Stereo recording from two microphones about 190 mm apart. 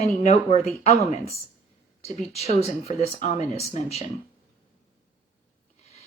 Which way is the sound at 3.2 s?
35° left (ahead or behind).